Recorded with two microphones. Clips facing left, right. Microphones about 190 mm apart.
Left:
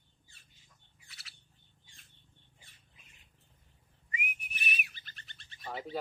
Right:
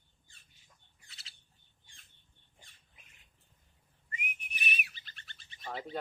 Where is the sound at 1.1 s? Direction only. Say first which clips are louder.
Left 1 dB; 25° right (ahead or behind).